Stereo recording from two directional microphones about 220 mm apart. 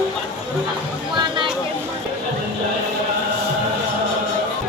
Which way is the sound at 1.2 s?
20° right (ahead or behind).